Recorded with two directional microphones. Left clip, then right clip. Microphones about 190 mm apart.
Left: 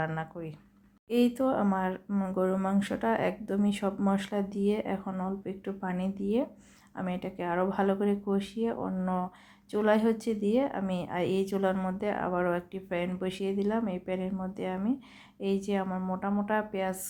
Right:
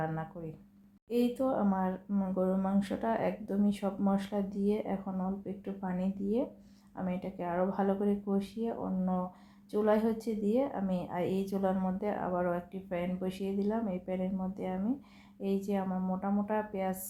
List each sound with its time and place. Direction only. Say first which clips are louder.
0.0 s speech: left 3 dB; 30° left (ahead or behind)